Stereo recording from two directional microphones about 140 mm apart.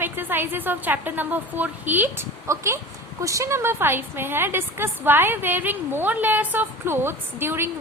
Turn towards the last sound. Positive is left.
turn(degrees=-15)  # may be behind; listen again after turning